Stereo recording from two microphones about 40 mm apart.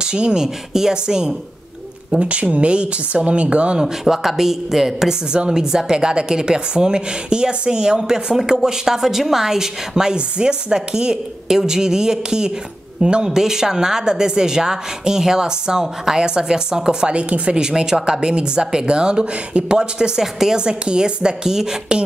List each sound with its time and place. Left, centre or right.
0.0 s a woman's voice: right
2.1 s speech: right
3.8 s a woman's voice: centre
17.1 s speech: right
17.6 s speech: centre